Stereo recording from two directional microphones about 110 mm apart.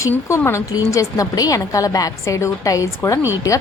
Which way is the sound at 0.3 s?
25° left (ahead or behind).